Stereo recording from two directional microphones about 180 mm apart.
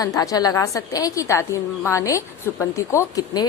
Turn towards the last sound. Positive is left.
turn(degrees=20)  # may be behind; listen again after turning